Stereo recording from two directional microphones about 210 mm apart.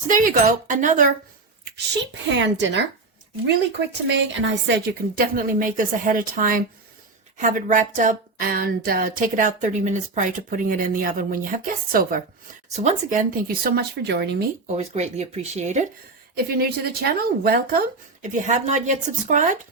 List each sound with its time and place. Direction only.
0.1 s speech: 40° right (ahead or behind)
1.7 s a woman's voice: 60° right (ahead or behind)
14.8 s speech: 30° right (ahead or behind)
17.4 s speech: 45° right (ahead or behind)